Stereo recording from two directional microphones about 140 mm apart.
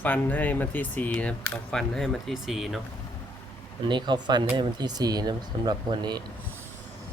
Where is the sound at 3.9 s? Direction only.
35° right (ahead or behind).